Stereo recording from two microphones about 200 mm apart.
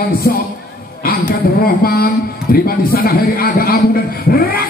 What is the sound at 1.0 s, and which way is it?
A man's voice, 50° left (ahead or behind).